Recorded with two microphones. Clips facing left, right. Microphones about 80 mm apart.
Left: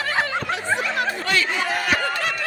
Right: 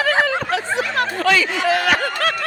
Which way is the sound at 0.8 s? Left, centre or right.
Right.